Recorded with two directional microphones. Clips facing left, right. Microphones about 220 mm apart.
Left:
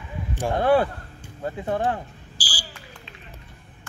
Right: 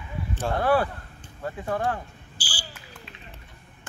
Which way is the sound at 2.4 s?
35° left (ahead or behind).